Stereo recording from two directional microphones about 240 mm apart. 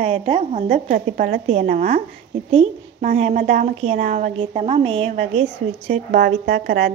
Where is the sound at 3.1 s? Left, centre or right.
Right.